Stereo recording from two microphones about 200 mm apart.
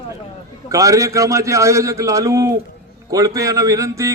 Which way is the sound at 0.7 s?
15° right (ahead or behind).